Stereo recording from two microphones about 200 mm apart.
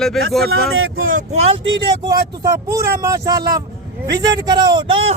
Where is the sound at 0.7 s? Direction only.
90° right.